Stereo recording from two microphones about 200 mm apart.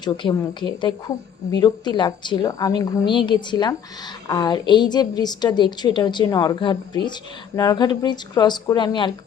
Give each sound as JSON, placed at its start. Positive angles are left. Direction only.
{"t": 0.0, "sound": "a woman's voice", "side_deg": 25}